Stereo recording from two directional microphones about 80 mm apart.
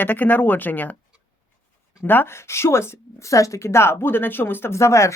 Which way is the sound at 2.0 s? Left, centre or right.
Left.